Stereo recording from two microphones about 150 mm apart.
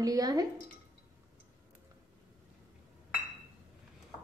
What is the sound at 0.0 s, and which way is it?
Speech, 25° right (ahead or behind).